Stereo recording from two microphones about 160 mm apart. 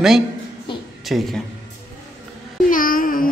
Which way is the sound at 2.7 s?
60° left (ahead or behind).